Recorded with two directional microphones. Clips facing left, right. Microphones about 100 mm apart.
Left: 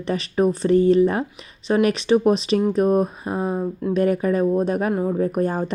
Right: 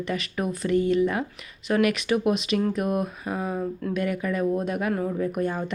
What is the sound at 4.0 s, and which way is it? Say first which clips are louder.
Speech: left 8 dB; 35° left (ahead or behind).